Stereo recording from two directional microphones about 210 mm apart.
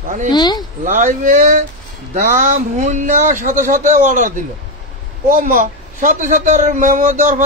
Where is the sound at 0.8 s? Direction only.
35° right (ahead or behind).